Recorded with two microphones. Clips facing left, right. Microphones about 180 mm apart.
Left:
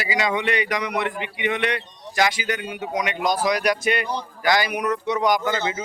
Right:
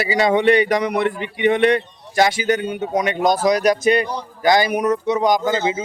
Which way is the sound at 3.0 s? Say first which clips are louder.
Right 5 dB; 45° right (ahead or behind).